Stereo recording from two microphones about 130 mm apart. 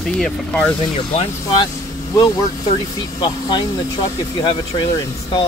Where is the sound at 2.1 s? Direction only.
30° left (ahead or behind).